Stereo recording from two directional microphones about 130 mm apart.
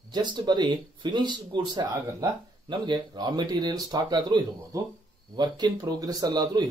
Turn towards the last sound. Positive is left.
turn(degrees=-30)  # may be behind; listen again after turning